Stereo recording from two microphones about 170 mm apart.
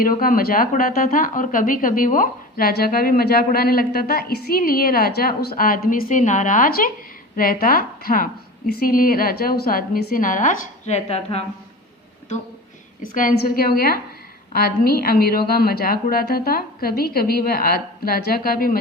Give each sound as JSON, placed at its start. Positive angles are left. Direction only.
{"t": 0.0, "sound": "a woman's voice", "side_deg": 55}
{"t": 13.1, "sound": "a woman's voice", "side_deg": 60}